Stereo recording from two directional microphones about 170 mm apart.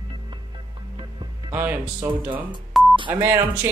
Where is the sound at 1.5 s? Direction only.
10° right (ahead or behind).